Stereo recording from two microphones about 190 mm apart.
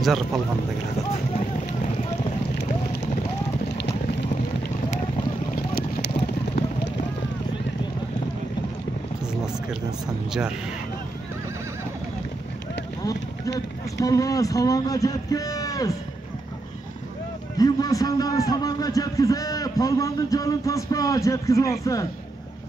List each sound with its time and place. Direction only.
0.0 s speech: centre (ahead or behind)
5.5 s vehicle: 55° left (ahead or behind)
13.0 s speech: 20° left (ahead or behind)
17.6 s a man's voice: 20° left (ahead or behind)